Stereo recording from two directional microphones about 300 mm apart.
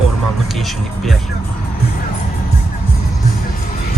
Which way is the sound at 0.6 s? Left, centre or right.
Centre.